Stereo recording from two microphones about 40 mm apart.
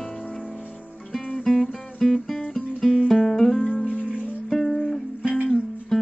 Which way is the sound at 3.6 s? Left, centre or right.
Left.